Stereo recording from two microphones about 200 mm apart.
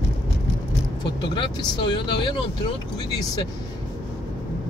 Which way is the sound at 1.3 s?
25° left (ahead or behind).